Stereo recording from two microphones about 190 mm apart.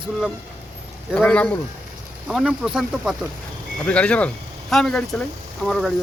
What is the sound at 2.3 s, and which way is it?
Speech, 5° right (ahead or behind).